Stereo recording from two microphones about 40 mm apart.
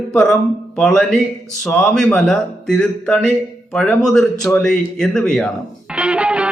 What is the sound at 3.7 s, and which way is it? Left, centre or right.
Speech, centre.